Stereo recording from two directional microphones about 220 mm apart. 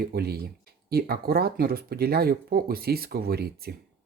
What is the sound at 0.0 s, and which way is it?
Speech, 45° right (ahead or behind).